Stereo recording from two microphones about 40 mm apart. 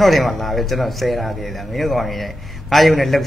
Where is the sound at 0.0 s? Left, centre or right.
Centre.